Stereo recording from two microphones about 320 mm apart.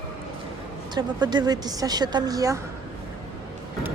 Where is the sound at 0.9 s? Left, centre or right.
Centre.